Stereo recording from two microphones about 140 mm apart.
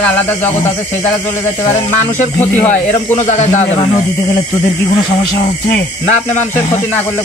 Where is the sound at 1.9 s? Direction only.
60° left (ahead or behind); by 3.9 s 45° left (ahead or behind).